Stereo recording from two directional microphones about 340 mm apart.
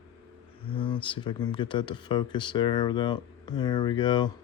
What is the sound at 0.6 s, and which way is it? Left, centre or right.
Speech, centre.